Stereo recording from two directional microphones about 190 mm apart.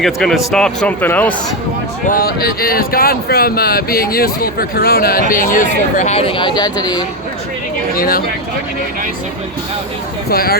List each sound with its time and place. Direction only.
0.0 s speech: centre (ahead or behind)
2.0 s speech: 50° left (ahead or behind); by 7.0 s 20° left (ahead or behind)
7.9 s speech: 50° left (ahead or behind)
10.2 s speech: 50° left (ahead or behind)